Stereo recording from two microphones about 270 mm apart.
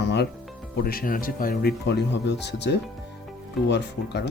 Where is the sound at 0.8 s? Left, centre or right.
Left.